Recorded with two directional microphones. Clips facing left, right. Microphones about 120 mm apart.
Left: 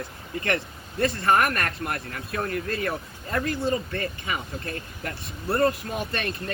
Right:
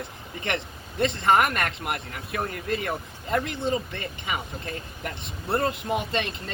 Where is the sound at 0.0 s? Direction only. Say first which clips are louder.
Left 3 dB; 20° right (ahead or behind).